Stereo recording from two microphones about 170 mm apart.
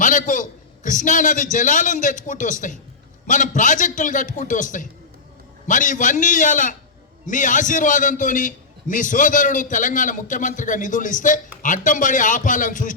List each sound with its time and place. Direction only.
0.0 s a man's voice: 50° left (ahead or behind)